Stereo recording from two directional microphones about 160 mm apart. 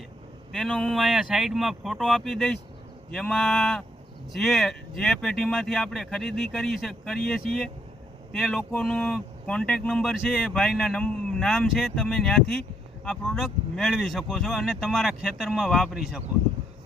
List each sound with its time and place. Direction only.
0.5 s speech: 5° left (ahead or behind)